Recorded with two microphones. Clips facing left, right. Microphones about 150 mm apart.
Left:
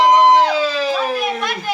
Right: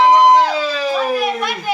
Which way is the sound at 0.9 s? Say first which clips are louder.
Right 2 dB; 5° right (ahead or behind).